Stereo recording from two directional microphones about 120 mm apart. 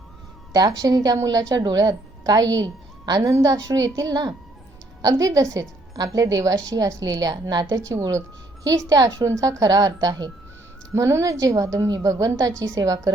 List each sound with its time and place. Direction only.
0.5 s a woman's voice: 35° right (ahead or behind)